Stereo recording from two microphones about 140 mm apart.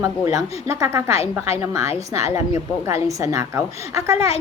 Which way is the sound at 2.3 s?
20° right (ahead or behind).